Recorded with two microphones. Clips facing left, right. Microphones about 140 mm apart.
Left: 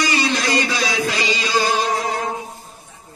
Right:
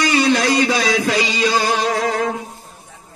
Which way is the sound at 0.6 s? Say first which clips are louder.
Right 4 dB; 50° right (ahead or behind).